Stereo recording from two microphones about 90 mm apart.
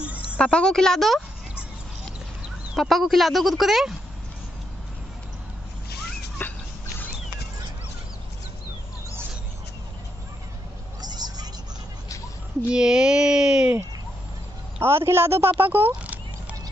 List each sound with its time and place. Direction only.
0.0 s a sound: 15° right (ahead or behind)
0.4 s a woman's voice: 10° left (ahead or behind)
2.7 s speech: centre (ahead or behind)
6.4 s bird: 20° left (ahead or behind)
11.0 s vehicle: 50° right (ahead or behind)
12.7 s speech: 10° right (ahead or behind)
14.8 s a man's voice: 25° right (ahead or behind)
16.0 s horse: 15° right (ahead or behind)